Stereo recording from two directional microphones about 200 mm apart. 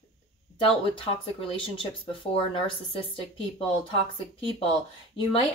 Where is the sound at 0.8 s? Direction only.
25° left (ahead or behind).